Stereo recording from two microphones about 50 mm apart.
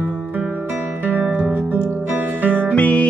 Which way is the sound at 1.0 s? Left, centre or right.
Right.